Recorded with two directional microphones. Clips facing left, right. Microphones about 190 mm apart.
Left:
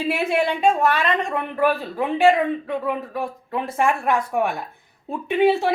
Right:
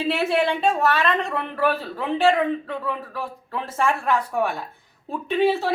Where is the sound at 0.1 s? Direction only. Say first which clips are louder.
Even; 15° left (ahead or behind).